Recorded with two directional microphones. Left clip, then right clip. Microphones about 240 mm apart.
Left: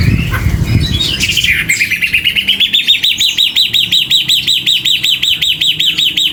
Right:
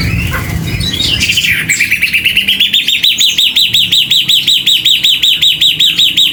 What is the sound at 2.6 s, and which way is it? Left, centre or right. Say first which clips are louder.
Chirp: even; centre.